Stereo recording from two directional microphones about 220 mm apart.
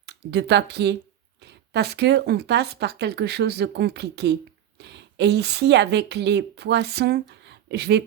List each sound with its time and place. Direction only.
0.0 s a woman's voice: 50° right (ahead or behind)